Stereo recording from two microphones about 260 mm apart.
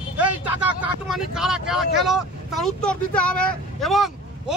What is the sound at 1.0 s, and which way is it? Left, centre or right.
Speech, centre.